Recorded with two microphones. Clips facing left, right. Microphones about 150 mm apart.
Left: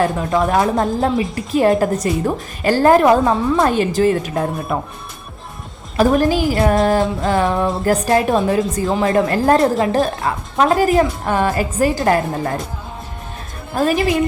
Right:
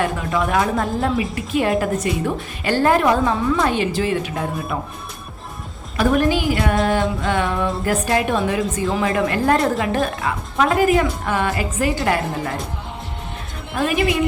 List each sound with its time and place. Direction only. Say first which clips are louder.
0.0 s a woman's voice: left 4 dB; 40° left (ahead or behind)
6.0 s a woman's voice: left 3 dB; 35° left (ahead or behind)
13.7 s a woman's voice: left 4 dB; 35° left (ahead or behind)